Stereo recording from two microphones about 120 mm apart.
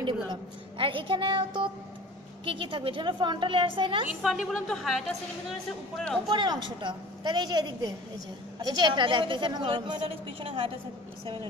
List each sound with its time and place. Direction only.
0.3 s a woman's voice: 45° right (ahead or behind)
4.2 s speech: centre (ahead or behind)
6.2 s a woman's voice: 40° right (ahead or behind)